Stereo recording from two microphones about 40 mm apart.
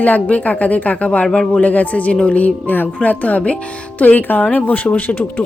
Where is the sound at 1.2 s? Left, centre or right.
Left.